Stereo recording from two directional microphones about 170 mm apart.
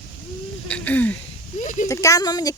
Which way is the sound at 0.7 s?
10° left (ahead or behind).